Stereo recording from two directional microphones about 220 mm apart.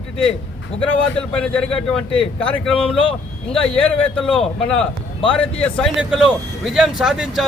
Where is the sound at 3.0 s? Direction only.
25° left (ahead or behind).